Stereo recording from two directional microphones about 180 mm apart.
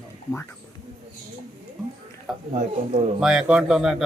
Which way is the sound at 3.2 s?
5° right (ahead or behind).